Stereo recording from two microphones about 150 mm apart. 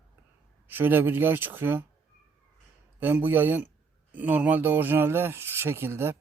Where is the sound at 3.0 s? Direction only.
15° right (ahead or behind).